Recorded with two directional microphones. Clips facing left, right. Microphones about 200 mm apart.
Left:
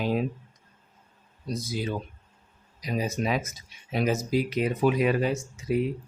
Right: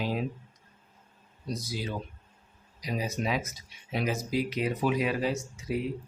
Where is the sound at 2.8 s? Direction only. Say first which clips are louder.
Left 3 dB; 50° left (ahead or behind).